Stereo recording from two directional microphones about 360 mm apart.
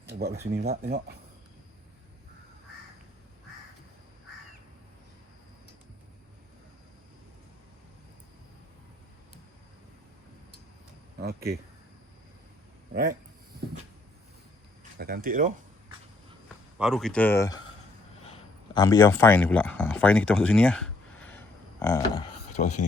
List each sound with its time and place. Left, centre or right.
0.6 s speech: right
11.2 s speech: right
12.9 s speech: right
14.9 s speech: right
16.7 s speech: centre